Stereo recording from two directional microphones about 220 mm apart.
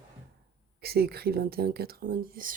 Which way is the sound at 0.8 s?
45° right (ahead or behind).